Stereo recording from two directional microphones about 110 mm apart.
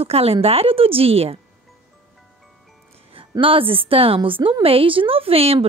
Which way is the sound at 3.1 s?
55° right (ahead or behind).